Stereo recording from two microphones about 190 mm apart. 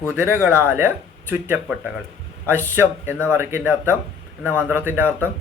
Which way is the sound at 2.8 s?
10° right (ahead or behind).